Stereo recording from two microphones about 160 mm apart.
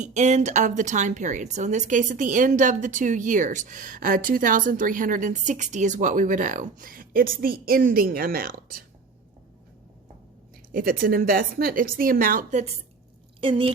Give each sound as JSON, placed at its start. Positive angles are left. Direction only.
{"t": 0.0, "sound": "a woman's voice", "side_deg": -50}
{"t": 10.7, "sound": "speech", "side_deg": -60}
{"t": 13.4, "sound": "speech", "side_deg": -35}